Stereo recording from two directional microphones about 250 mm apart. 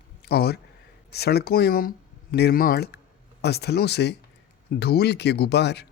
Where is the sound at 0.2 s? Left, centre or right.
Left.